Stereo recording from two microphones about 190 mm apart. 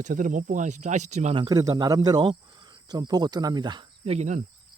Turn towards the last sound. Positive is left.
turn(degrees=-40)  # may be behind; listen again after turning